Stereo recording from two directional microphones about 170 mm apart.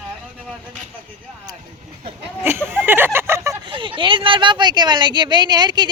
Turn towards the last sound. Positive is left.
turn(degrees=-25)  # may be behind; listen again after turning